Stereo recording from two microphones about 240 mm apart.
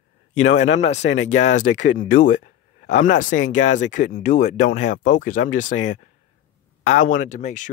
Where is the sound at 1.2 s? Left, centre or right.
Left.